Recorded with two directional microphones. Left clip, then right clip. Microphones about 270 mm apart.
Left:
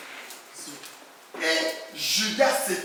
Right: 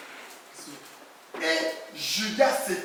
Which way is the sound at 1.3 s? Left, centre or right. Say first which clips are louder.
Left 1 dB; centre.